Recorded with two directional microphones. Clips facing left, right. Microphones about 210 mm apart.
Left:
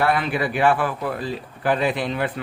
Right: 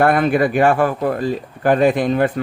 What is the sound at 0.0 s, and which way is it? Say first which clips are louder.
Speech: right 7 dB; 50° right (ahead or behind).